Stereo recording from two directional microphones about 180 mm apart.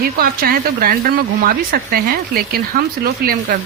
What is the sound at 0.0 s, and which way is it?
A woman's voice, 55° right (ahead or behind).